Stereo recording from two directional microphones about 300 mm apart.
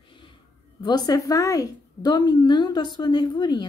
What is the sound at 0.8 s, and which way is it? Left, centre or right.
Speech, centre.